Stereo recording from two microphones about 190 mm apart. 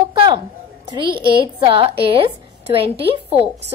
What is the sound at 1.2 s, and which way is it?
A woman's voice, 25° right (ahead or behind).